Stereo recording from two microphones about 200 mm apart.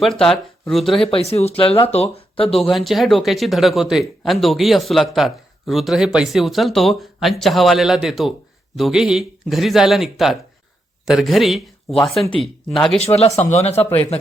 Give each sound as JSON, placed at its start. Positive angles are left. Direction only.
{"t": 0.0, "sound": "speech", "side_deg": 0}
{"t": 1.1, "sound": "speech", "side_deg": 30}
{"t": 2.5, "sound": "speech", "side_deg": 0}
{"t": 13.0, "sound": "speech", "side_deg": 30}